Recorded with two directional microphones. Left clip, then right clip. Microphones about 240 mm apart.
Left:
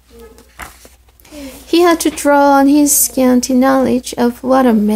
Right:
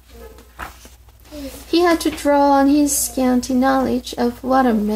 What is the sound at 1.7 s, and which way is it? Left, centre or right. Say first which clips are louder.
Speech: left 5 dB; left.